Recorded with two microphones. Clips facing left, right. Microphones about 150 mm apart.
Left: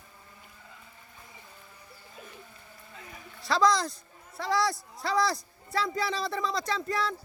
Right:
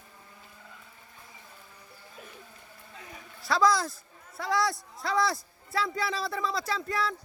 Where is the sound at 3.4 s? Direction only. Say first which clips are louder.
Even; centre (ahead or behind).